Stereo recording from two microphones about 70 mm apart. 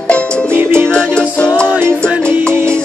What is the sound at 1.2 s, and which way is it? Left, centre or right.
Music, centre.